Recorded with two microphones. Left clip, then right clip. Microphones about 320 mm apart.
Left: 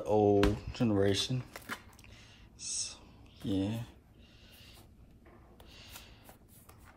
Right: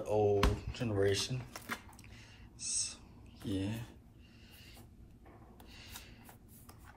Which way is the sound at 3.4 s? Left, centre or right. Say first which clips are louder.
Left 4 dB; centre.